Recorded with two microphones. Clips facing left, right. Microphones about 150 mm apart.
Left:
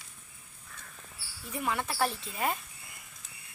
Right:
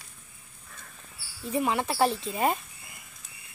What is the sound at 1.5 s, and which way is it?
Speech, 25° right (ahead or behind).